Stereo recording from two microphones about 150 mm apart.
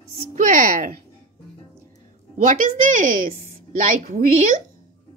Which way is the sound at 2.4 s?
60° right (ahead or behind).